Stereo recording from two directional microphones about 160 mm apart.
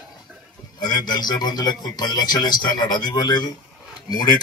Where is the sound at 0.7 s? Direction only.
25° left (ahead or behind).